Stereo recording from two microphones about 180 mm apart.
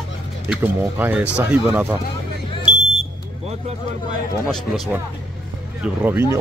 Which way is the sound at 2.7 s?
40° right (ahead or behind).